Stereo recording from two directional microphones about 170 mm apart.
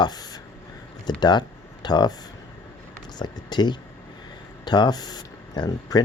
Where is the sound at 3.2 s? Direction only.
25° left (ahead or behind).